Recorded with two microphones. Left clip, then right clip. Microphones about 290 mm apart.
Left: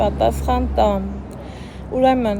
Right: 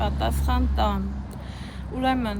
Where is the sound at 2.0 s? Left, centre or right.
Centre.